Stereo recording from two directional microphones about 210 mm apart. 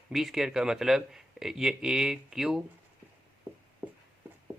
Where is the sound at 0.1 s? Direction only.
Centre (ahead or behind).